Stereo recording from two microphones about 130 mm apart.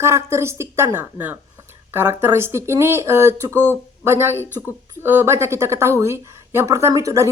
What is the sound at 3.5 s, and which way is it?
Speech, 15° left (ahead or behind).